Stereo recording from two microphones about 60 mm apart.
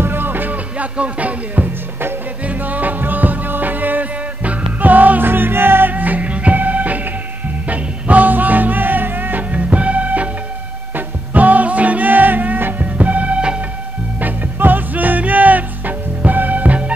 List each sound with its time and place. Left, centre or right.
0.0 s music: right; by 13.6 s centre
14.2 s music: right